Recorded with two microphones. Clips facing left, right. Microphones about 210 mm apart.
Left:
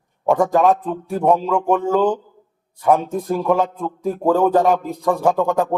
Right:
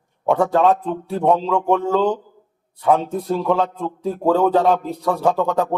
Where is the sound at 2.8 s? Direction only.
10° left (ahead or behind).